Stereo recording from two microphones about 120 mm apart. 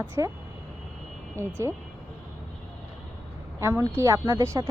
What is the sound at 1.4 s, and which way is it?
Speech, 20° right (ahead or behind).